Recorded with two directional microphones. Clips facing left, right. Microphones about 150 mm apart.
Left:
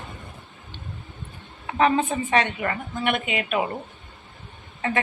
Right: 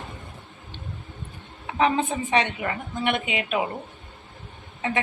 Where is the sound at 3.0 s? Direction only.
20° right (ahead or behind).